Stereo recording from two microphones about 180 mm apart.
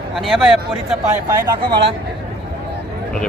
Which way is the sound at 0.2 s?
Centre (ahead or behind).